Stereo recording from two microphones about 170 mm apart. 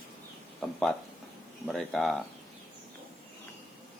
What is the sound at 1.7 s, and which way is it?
Speech, centre (ahead or behind).